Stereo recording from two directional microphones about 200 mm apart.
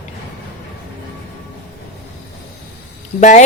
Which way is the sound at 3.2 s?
35° left (ahead or behind).